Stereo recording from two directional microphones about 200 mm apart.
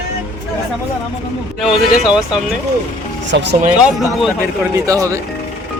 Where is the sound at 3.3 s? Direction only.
60° right (ahead or behind).